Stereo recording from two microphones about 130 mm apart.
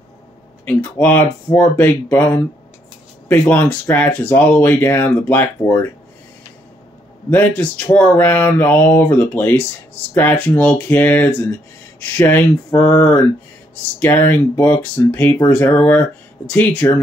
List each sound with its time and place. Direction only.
0.7 s speech: 15° left (ahead or behind)
7.2 s speech: 15° left (ahead or behind)